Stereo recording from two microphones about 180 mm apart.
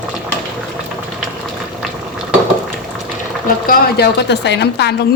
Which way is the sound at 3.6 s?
70° left (ahead or behind).